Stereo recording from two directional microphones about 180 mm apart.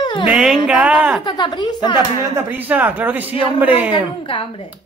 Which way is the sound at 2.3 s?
10° right (ahead or behind).